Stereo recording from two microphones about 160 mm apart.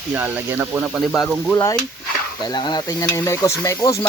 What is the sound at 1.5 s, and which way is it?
Speech, 15° left (ahead or behind).